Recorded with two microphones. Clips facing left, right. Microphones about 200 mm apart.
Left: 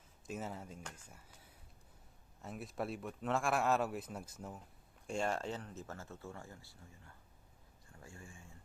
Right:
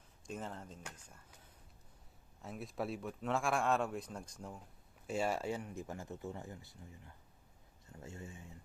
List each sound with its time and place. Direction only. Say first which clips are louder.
0.3 s speech: left 1 dB; 5° left (ahead or behind); by 8.5 s 20° right (ahead or behind)